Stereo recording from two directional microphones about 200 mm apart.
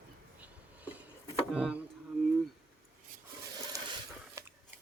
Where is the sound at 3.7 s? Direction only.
15° right (ahead or behind).